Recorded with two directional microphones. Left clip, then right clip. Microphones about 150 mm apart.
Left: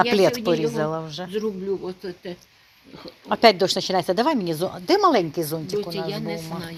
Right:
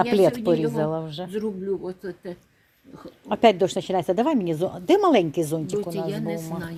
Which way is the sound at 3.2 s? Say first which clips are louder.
Left 2 dB; 15° right (ahead or behind).